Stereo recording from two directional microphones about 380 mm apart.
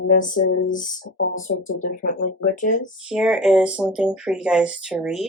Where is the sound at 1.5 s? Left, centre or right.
Left.